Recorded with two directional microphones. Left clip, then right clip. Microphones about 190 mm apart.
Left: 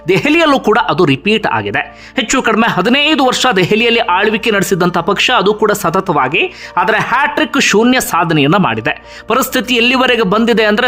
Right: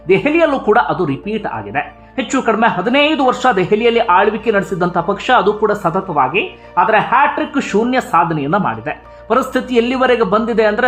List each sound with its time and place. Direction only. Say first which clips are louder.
0.1 s speech: left 2 dB; 25° left (ahead or behind)